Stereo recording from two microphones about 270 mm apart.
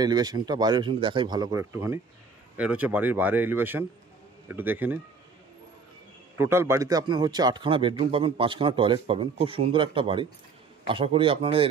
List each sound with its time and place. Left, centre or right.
0.0 s speech: centre
6.3 s a man's voice: centre